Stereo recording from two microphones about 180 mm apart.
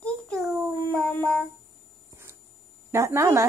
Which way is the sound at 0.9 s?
10° left (ahead or behind).